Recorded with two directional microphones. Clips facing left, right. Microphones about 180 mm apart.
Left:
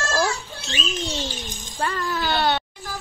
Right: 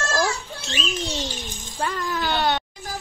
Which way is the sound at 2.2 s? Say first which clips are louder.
Left 1 dB; centre (ahead or behind).